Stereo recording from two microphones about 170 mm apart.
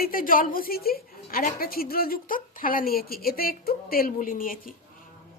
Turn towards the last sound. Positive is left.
turn(degrees=55)  # may be behind; listen again after turning